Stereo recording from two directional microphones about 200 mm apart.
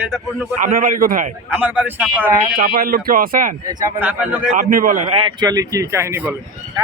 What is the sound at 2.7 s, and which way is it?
Speech, 50° right (ahead or behind).